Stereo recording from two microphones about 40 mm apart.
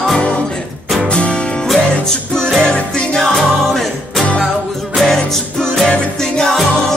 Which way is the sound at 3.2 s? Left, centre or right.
Centre.